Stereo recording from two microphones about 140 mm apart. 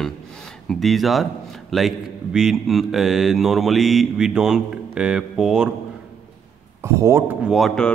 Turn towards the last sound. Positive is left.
turn(degrees=0)  # may be behind; listen again after turning